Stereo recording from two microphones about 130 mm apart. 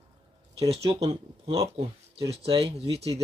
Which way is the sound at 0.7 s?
50° right (ahead or behind).